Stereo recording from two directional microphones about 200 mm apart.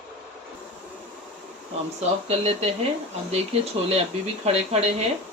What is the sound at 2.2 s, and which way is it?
Speech, 30° right (ahead or behind).